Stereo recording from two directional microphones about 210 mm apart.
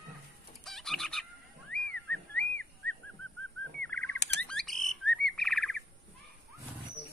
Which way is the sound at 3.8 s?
5° left (ahead or behind).